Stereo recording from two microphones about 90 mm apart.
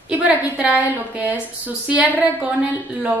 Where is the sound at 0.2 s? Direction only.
15° right (ahead or behind).